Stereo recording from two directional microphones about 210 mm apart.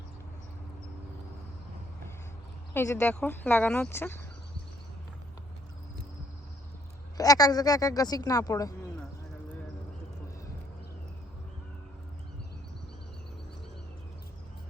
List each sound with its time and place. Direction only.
2.7 s speech: 10° left (ahead or behind)
7.2 s speech: 15° left (ahead or behind)